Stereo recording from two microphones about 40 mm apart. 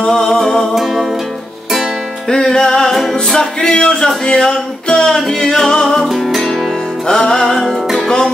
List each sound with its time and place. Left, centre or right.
0.1 s music: centre
2.2 s music: centre
6.0 s music: centre
7.1 s music: centre
7.5 s music: centre